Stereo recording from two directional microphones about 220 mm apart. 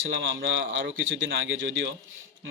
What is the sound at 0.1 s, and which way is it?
Speech, 55° right (ahead or behind).